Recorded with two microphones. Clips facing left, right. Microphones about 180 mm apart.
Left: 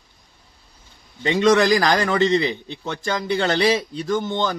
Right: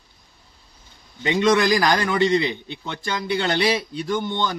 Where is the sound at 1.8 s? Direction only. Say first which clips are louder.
Left 1 dB; 40° left (ahead or behind).